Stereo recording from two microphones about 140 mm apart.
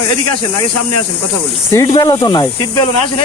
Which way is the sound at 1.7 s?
20° left (ahead or behind).